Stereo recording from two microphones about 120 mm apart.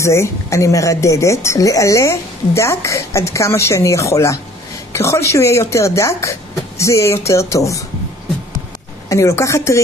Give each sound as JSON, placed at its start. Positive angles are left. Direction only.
{"t": 0.0, "sound": "a woman's voice", "side_deg": 25}
{"t": 9.1, "sound": "a woman's voice", "side_deg": 25}